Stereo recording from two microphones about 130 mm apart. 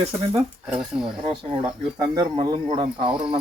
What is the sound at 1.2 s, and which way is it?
Speech, 35° right (ahead or behind).